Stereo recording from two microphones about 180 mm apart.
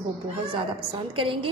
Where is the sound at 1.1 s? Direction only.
30° right (ahead or behind).